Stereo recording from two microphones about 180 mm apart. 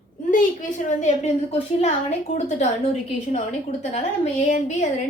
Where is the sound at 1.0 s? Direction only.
40° left (ahead or behind).